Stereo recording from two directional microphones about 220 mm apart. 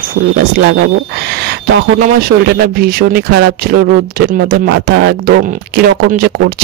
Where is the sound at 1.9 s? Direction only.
40° right (ahead or behind).